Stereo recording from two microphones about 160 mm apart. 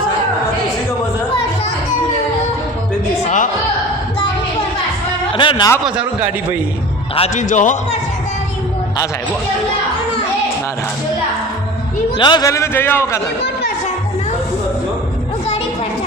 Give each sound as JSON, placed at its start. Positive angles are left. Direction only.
{"t": 3.2, "sound": "music", "side_deg": 50}
{"t": 5.3, "sound": "a man's voice", "side_deg": 30}
{"t": 7.2, "sound": "a man's voice", "side_deg": 50}
{"t": 12.1, "sound": "a man's voice", "side_deg": 30}